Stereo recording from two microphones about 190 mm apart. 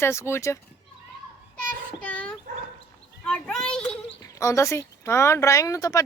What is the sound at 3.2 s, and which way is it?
Speech, centre (ahead or behind).